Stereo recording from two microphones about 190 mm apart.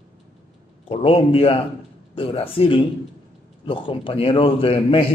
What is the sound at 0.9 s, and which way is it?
A man's voice, 30° left (ahead or behind).